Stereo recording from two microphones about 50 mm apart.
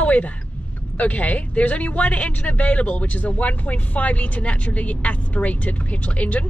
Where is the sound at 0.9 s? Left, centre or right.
Left.